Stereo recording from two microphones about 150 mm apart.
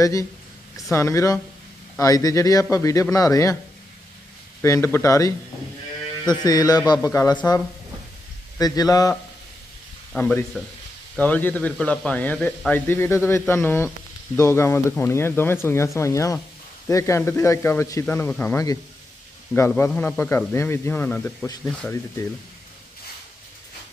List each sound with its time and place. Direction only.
0.0 s speech: 20° left (ahead or behind)
4.6 s speech: 20° left (ahead or behind)
10.1 s speech: 10° left (ahead or behind)